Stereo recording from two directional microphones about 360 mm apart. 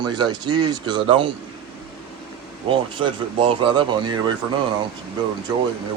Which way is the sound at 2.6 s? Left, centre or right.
Centre.